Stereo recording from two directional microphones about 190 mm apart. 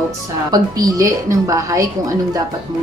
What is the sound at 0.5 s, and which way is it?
A woman's voice, 20° right (ahead or behind).